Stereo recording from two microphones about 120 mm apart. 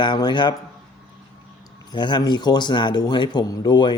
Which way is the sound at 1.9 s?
40° left (ahead or behind).